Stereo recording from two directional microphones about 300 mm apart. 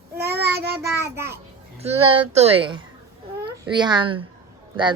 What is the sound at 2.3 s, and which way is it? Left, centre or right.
A child's voice, centre.